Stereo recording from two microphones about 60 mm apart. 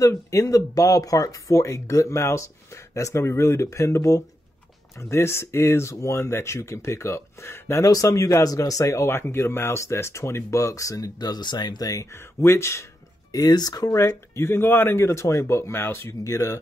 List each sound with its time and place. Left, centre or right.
0.0 s speech: left
5.0 s speech: left
7.9 s speech: left
8.3 s speech: left
12.4 s speech: left
13.3 s speech: left
13.9 s speech: left
16.3 s speech: left